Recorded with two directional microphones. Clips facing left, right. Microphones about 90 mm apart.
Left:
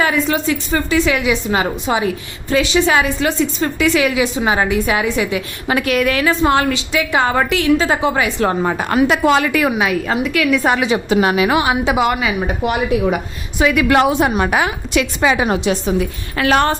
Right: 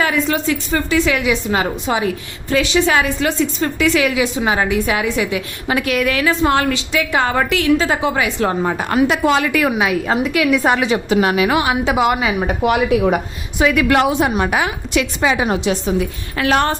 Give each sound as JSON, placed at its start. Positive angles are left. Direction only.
{"t": 0.0, "sound": "a woman's voice", "side_deg": 20}
{"t": 5.6, "sound": "a woman's voice", "side_deg": 50}
{"t": 6.4, "sound": "a woman's voice", "side_deg": 20}
{"t": 8.4, "sound": "a woman's voice", "side_deg": 65}
{"t": 9.7, "sound": "a woman's voice", "side_deg": -5}
{"t": 10.2, "sound": "a woman's voice", "side_deg": -20}
{"t": 11.1, "sound": "a woman's voice", "side_deg": 25}
{"t": 12.4, "sound": "speech", "side_deg": -80}
{"t": 13.6, "sound": "a woman's voice", "side_deg": 0}
{"t": 13.8, "sound": "a woman's voice", "side_deg": 25}
{"t": 14.1, "sound": "a woman's voice", "side_deg": 50}
{"t": 15.2, "sound": "a woman's voice", "side_deg": 75}